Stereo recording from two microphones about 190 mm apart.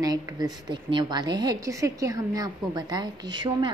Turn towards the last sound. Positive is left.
turn(degrees=-25)  # may be behind; listen again after turning